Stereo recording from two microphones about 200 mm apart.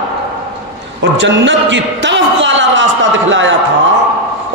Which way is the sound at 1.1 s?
65° right (ahead or behind).